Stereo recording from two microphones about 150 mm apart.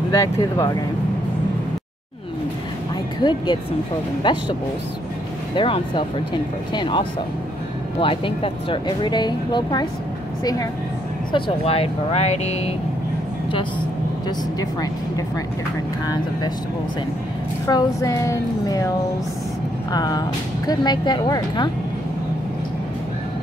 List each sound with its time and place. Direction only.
0.1 s a woman's voice: 20° left (ahead or behind)
3.2 s a woman's voice: 30° left (ahead or behind)
5.6 s speech: 35° left (ahead or behind)
11.3 s speech: 40° left (ahead or behind)
14.6 s a woman's voice: 25° left (ahead or behind)
17.6 s a woman's voice: 25° left (ahead or behind)
19.9 s a woman's voice: 25° left (ahead or behind)